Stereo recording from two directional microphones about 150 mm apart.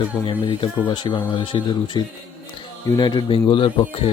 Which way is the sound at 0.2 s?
30° left (ahead or behind).